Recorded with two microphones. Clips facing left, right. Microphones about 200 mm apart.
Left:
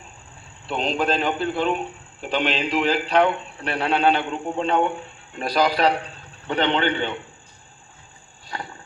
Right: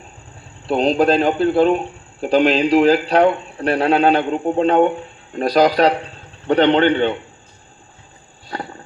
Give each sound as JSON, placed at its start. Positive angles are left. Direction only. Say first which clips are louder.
{"t": 0.7, "sound": "a man's voice", "louder": "right 8 dB", "side_deg": -40}